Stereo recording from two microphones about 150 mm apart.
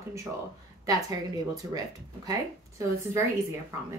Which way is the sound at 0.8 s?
25° right (ahead or behind).